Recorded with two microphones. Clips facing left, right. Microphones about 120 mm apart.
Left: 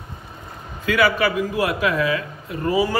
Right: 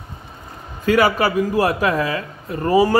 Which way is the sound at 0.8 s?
45° right (ahead or behind).